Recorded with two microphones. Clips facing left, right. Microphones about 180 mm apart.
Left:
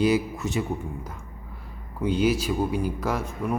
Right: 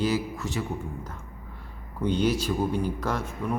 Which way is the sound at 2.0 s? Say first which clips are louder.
Left 2 dB; 5° left (ahead or behind).